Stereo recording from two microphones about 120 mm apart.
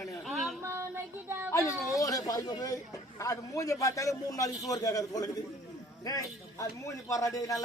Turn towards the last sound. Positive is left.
turn(degrees=30)  # may be behind; listen again after turning